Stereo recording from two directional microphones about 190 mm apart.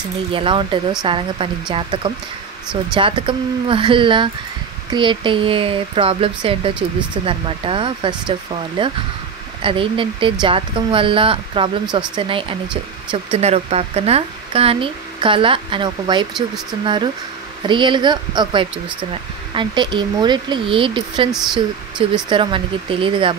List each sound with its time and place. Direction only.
0.3 s speech: 25° right (ahead or behind)
22.3 s speech: 25° right (ahead or behind)